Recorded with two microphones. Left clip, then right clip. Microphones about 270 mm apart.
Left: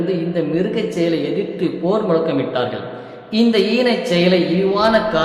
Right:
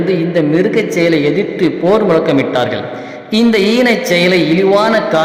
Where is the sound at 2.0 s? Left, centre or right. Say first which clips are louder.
Right 6 dB; right.